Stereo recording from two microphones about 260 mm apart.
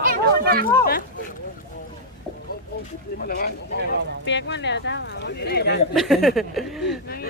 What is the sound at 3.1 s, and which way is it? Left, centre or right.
Speech, left.